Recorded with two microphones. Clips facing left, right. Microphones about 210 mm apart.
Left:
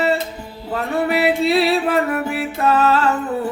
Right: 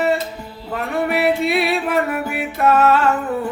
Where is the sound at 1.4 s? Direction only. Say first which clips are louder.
Left 3 dB; 30° left (ahead or behind).